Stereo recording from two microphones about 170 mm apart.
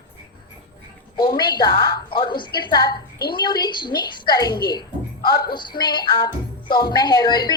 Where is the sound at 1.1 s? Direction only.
25° left (ahead or behind).